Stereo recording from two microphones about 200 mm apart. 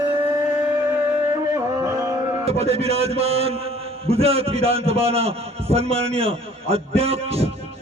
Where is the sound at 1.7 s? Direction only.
15° right (ahead or behind).